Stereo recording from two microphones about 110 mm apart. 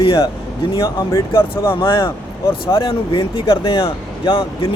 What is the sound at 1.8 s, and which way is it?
Speech, 50° left (ahead or behind).